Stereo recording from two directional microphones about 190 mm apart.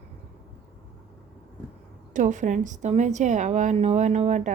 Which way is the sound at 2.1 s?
40° right (ahead or behind).